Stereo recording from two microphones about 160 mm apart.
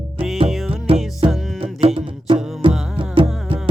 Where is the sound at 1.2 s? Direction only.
35° right (ahead or behind).